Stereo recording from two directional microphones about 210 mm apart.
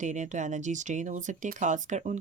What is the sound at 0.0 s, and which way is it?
Speech, 35° right (ahead or behind).